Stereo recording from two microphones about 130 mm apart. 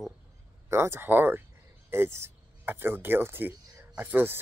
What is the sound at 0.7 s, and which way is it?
Speech, 20° right (ahead or behind).